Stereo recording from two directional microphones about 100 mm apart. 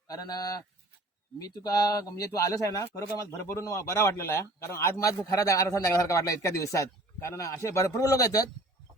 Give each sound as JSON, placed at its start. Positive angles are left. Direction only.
{"t": 0.1, "sound": "a man's voice", "side_deg": 40}